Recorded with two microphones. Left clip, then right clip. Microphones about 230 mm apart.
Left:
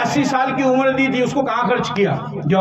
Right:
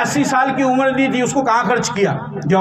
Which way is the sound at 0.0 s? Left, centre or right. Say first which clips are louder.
Right 2 dB; right.